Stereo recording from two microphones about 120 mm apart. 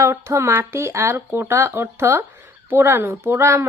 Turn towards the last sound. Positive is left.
turn(degrees=-20)  # may be behind; listen again after turning